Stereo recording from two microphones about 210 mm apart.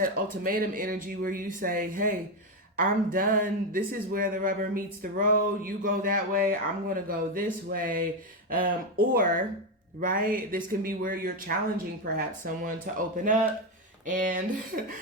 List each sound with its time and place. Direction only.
0.4 s speech: 40° right (ahead or behind)
12.6 s speech: 40° right (ahead or behind)